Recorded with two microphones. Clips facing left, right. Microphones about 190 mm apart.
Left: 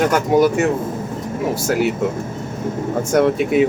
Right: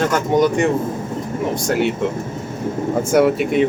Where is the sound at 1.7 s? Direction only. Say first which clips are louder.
Even; 5° left (ahead or behind).